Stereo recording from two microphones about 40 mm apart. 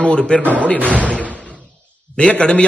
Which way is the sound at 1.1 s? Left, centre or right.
Left.